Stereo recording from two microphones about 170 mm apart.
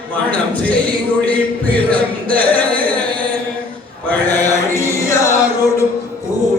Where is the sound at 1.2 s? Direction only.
10° left (ahead or behind).